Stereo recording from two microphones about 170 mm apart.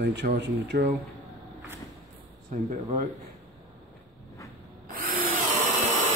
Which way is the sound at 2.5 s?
45° right (ahead or behind).